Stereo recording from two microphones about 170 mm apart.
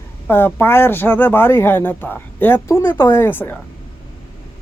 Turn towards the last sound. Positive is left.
turn(degrees=10)  # may be behind; listen again after turning